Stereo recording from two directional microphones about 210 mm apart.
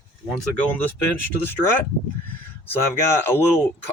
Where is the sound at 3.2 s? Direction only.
10° left (ahead or behind).